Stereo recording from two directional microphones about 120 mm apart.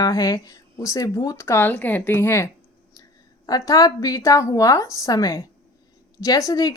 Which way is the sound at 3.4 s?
30° left (ahead or behind).